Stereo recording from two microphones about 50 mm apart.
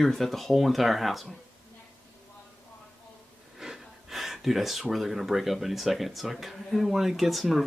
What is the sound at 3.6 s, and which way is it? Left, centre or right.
Speech, centre.